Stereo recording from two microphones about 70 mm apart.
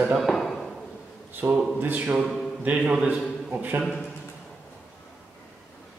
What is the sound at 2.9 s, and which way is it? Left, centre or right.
Speech, centre.